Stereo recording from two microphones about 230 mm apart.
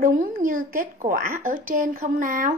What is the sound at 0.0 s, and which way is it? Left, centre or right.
A woman's voice, right.